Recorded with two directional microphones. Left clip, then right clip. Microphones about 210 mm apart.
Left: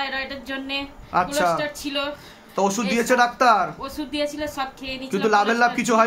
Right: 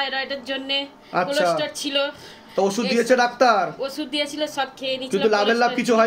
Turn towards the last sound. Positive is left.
turn(degrees=20)  # may be behind; listen again after turning